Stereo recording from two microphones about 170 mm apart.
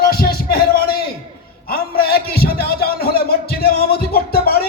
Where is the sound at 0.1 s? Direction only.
60° left (ahead or behind).